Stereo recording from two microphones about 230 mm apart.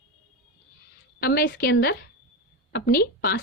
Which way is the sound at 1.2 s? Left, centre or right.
Left.